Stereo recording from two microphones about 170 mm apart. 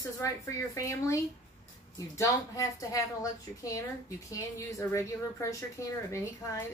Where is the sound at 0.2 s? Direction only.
15° left (ahead or behind).